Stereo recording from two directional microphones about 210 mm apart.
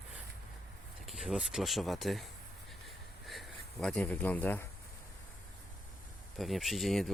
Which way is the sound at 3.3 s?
Centre (ahead or behind).